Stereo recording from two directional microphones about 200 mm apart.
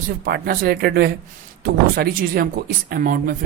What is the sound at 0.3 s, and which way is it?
Speech, 50° right (ahead or behind).